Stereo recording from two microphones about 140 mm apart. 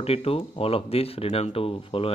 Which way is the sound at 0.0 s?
45° left (ahead or behind).